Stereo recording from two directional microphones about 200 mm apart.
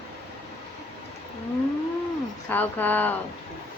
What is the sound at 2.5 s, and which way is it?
Speech, 10° left (ahead or behind).